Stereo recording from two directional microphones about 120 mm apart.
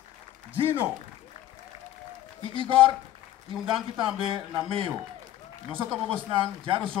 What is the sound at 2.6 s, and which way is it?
Speech, 45° right (ahead or behind).